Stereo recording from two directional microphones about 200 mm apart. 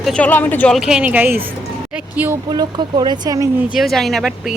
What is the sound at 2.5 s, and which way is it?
Speech, 20° right (ahead or behind).